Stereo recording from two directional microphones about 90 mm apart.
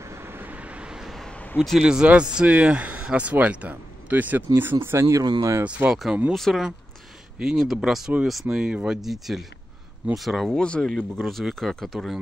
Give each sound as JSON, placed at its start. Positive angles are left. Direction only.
{"t": 0.0, "sound": "vehicle", "side_deg": -30}
{"t": 1.3, "sound": "a sound", "side_deg": 15}
{"t": 1.6, "sound": "speech", "side_deg": -5}
{"t": 5.6, "sound": "speech", "side_deg": -15}
{"t": 6.3, "sound": "speech", "side_deg": 0}
{"t": 10.6, "sound": "speech", "side_deg": 10}